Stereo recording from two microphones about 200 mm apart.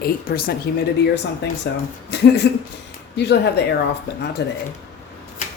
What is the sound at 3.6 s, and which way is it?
Speech, 55° left (ahead or behind).